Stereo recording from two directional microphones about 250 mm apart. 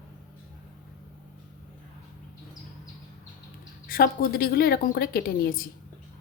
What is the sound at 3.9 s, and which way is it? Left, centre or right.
A woman's voice, left.